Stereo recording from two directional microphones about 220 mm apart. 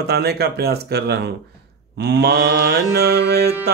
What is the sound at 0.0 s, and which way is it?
Mantra, 45° right (ahead or behind).